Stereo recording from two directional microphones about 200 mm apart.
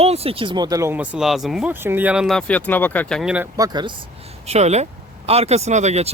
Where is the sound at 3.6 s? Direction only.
20° right (ahead or behind).